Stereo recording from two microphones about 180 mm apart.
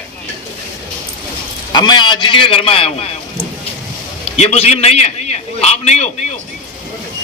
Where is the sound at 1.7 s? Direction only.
25° left (ahead or behind).